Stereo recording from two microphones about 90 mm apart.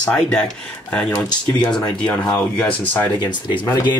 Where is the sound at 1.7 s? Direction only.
55° left (ahead or behind).